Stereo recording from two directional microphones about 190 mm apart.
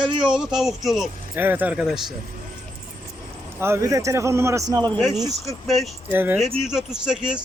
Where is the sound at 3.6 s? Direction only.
15° right (ahead or behind).